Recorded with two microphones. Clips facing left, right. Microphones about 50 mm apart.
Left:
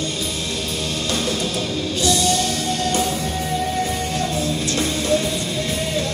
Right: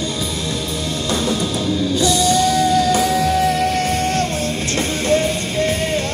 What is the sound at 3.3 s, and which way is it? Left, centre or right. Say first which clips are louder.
Music: right 6 dB; right.